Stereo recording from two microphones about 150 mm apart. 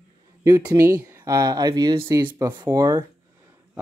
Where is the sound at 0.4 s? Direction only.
25° right (ahead or behind).